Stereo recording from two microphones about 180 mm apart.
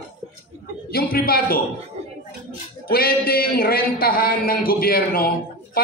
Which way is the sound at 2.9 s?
55° left (ahead or behind).